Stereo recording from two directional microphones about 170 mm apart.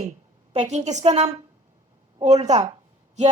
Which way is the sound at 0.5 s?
40° right (ahead or behind).